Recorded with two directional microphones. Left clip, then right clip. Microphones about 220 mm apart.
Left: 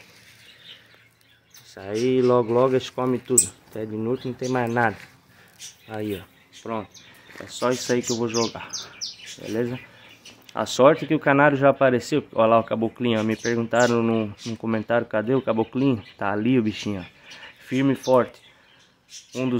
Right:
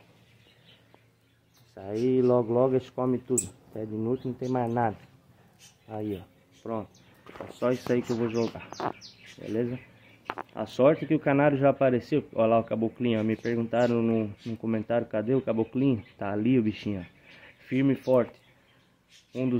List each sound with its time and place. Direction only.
1.7 s speech: 15° left (ahead or behind)
6.6 s speech: 20° left (ahead or behind)
7.5 s speech: 5° left (ahead or behind)